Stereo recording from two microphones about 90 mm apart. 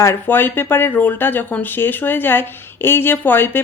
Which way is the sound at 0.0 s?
25° left (ahead or behind).